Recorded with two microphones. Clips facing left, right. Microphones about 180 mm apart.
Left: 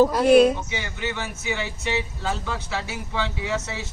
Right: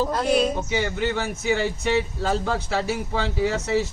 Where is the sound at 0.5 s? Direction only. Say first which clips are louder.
Right 6 dB; 45° right (ahead or behind).